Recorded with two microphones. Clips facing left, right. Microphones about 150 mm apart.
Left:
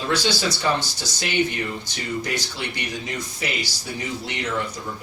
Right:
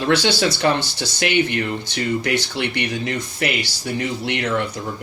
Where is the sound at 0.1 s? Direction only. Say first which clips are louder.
Right 5 dB; 65° right (ahead or behind).